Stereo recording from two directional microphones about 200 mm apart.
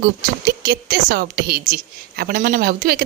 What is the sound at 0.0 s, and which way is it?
A woman's voice, 50° right (ahead or behind).